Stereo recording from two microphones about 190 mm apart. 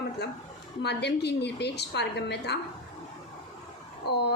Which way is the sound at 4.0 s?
60° left (ahead or behind).